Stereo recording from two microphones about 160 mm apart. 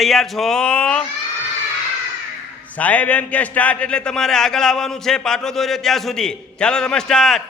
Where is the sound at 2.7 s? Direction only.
10° left (ahead or behind).